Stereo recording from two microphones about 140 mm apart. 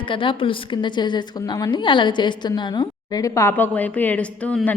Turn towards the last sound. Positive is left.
turn(degrees=10)  # may be behind; listen again after turning